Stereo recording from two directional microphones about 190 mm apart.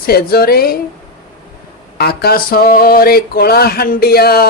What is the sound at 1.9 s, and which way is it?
Speech, 55° left (ahead or behind).